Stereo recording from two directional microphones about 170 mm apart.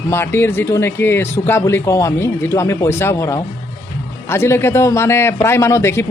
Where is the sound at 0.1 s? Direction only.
15° left (ahead or behind).